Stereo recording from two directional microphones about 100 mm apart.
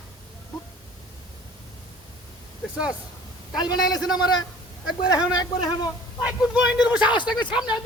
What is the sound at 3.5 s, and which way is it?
Speech, 45° left (ahead or behind).